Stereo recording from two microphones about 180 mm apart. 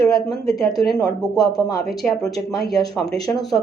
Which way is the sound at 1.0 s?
20° left (ahead or behind).